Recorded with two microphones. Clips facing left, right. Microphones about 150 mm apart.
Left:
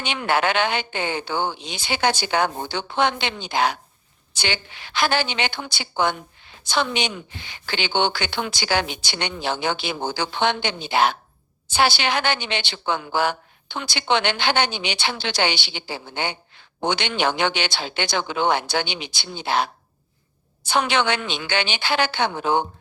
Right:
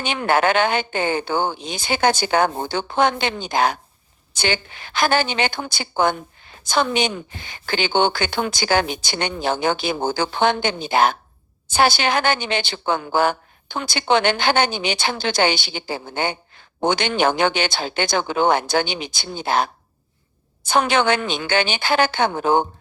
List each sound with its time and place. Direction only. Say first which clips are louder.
0.0 s a woman's voice: right 3 dB; 45° right (ahead or behind)